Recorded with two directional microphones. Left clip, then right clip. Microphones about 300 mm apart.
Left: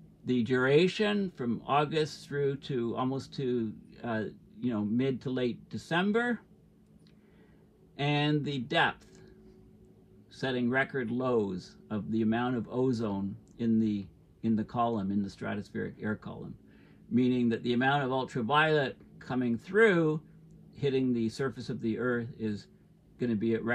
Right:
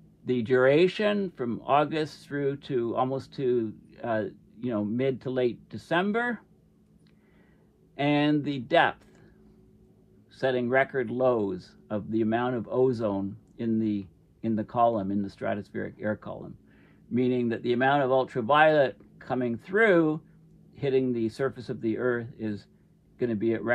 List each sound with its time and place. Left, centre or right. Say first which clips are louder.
0.2 s speech: right 6 dB; right
8.0 s speech: right 5 dB; right
10.3 s speech: right 6 dB; right